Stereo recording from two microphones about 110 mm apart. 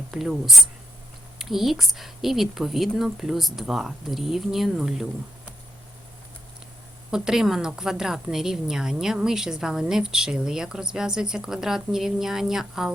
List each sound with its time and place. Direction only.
0.1 s a woman's voice: centre (ahead or behind)
7.1 s a woman's voice: 5° right (ahead or behind)